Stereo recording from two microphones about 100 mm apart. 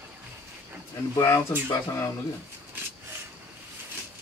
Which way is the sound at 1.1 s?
30° left (ahead or behind).